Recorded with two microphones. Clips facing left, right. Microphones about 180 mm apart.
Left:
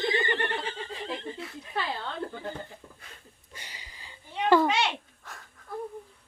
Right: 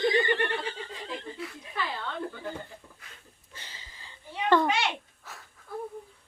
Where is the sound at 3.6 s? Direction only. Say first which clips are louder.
Left 1 dB; 15° left (ahead or behind).